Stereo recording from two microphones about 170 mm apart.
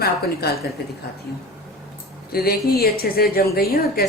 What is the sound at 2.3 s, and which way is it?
A woman's voice, 65° left (ahead or behind).